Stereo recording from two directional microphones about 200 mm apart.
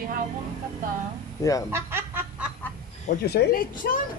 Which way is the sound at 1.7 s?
10° right (ahead or behind).